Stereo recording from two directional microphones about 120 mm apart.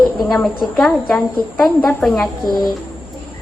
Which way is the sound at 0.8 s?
5° left (ahead or behind).